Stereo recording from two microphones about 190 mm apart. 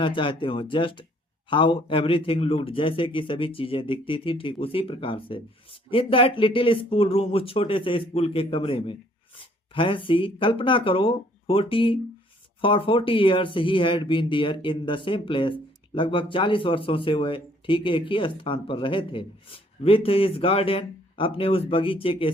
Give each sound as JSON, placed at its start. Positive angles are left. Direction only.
{"t": 0.0, "sound": "a man's voice", "side_deg": 25}